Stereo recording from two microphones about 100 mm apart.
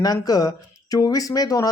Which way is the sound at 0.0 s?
40° left (ahead or behind).